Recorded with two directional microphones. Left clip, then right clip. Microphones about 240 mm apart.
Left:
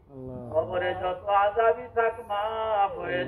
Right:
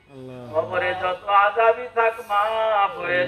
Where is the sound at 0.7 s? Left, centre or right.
Left.